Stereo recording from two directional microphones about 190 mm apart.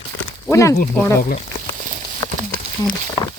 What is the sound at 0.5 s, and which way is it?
Speech, 15° left (ahead or behind).